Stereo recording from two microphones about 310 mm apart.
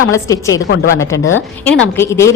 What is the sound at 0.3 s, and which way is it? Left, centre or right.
Speech, centre.